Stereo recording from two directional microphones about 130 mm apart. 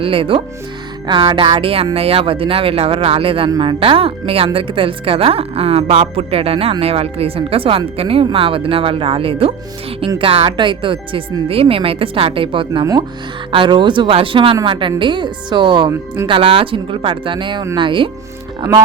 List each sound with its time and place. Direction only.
0.0 s speech: 45° right (ahead or behind)
12.8 s speech: 30° right (ahead or behind)
13.5 s a woman's voice: 40° right (ahead or behind)